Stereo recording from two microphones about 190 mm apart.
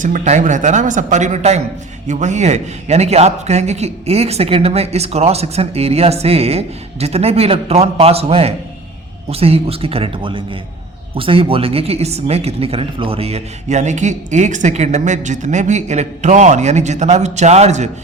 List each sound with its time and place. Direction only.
0.0 s speech: 40° right (ahead or behind)